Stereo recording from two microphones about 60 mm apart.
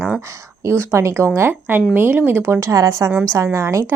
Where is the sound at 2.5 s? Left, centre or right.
Right.